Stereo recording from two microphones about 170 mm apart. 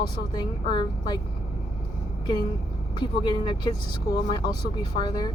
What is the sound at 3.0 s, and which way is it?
Speech, 25° left (ahead or behind).